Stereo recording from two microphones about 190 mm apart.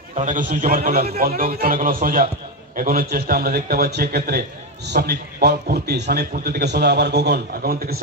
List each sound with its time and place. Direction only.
0.1 s a man's voice: 40° right (ahead or behind)
1.2 s a man's voice: 50° right (ahead or behind)